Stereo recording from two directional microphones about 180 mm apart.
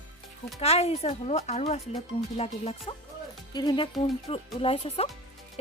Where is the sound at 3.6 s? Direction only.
25° left (ahead or behind).